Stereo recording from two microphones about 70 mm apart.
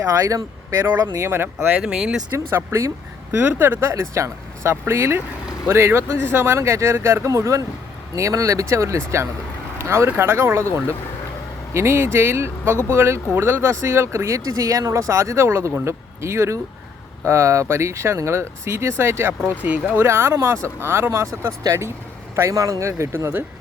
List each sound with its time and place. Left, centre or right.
0.0 s speech: right
1.1 s speech: right
1.8 s speech: centre
3.3 s speech: right
11.7 s speech: right
19.4 s speech: right
20.0 s speech: right